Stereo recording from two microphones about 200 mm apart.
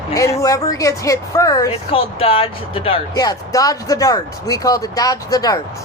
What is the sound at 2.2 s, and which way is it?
Speech, 25° left (ahead or behind).